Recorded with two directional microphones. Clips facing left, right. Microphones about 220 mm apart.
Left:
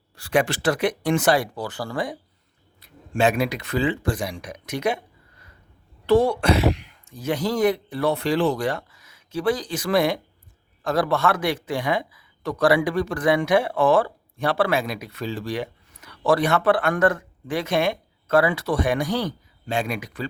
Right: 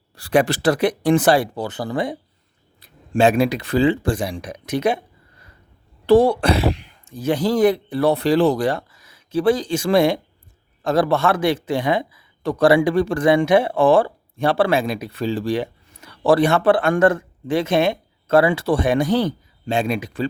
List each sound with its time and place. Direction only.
0.2 s speech: 35° right (ahead or behind)
2.8 s speech: 30° right (ahead or behind)
6.1 s speech: 35° right (ahead or behind)